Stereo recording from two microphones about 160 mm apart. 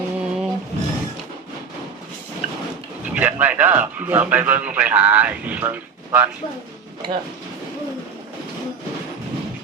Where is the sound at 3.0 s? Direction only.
10° right (ahead or behind).